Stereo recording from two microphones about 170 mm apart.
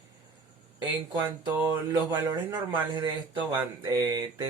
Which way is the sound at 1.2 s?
15° right (ahead or behind).